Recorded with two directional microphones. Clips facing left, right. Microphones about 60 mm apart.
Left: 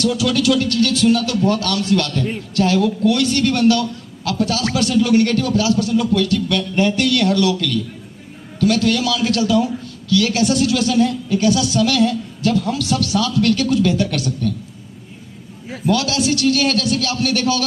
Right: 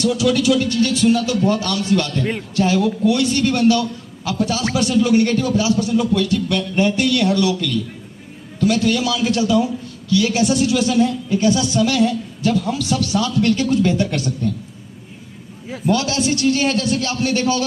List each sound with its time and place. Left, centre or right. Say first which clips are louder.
0.0 s a man's voice: right 1 dB; centre
13.1 s a man's voice: even; right
15.9 s a man's voice: left 1 dB; right